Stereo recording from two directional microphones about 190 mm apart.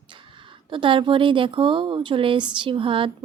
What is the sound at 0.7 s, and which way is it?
A woman's voice, 25° right (ahead or behind).